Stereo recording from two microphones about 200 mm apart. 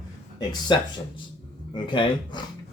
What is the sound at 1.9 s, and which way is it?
Speech, 25° left (ahead or behind).